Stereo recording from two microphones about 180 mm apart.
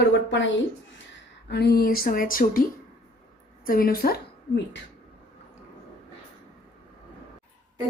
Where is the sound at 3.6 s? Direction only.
55° left (ahead or behind).